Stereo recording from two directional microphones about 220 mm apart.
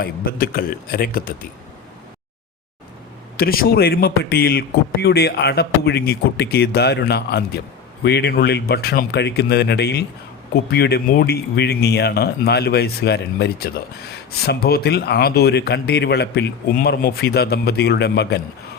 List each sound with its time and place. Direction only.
0.0 s a man's voice: 40° left (ahead or behind)
3.3 s speech: 45° left (ahead or behind)